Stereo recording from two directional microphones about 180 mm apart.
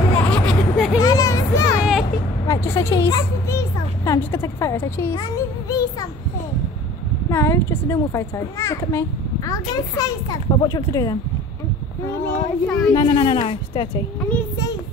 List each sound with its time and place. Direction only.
0.3 s a sound: 5° left (ahead or behind)
1.0 s a sound: 20° left (ahead or behind)
1.8 s vehicle: centre (ahead or behind)
2.4 s a child's voice: 15° left (ahead or behind)
5.7 s child singing: 20° left (ahead or behind)
7.2 s a child's voice: 15° left (ahead or behind)
12.3 s speech: 5° left (ahead or behind)
12.9 s speech: 30° left (ahead or behind)